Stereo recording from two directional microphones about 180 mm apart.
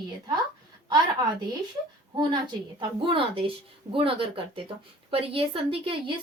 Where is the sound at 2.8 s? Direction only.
25° right (ahead or behind).